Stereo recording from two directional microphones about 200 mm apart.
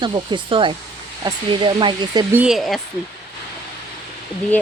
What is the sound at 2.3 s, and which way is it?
Speech, 5° right (ahead or behind).